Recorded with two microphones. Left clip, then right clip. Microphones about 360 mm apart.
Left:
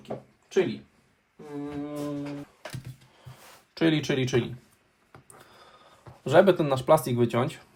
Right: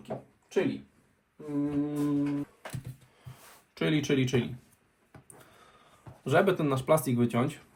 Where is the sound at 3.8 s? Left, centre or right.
Left.